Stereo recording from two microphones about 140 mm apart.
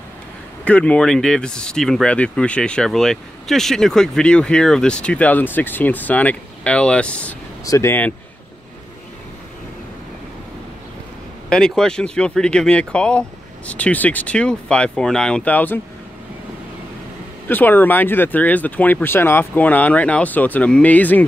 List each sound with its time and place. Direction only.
0.7 s speech: 10° left (ahead or behind)
7.6 s speech: 20° left (ahead or behind)
11.4 s speech: 5° left (ahead or behind)
17.5 s speech: 15° left (ahead or behind)